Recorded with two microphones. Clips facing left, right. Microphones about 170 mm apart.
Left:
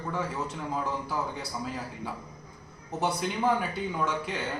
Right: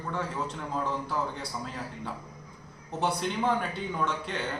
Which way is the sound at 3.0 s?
5° left (ahead or behind).